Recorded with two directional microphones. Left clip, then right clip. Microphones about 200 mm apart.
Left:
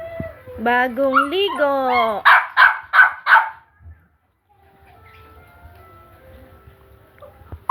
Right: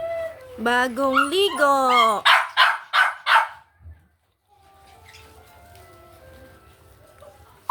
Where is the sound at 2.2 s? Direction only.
30° left (ahead or behind).